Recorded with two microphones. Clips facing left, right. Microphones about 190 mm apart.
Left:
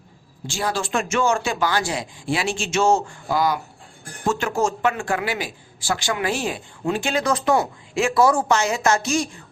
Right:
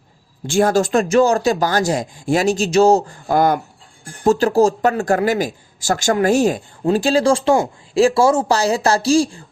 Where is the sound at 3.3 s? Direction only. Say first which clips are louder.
Right 6 dB; 50° right (ahead or behind).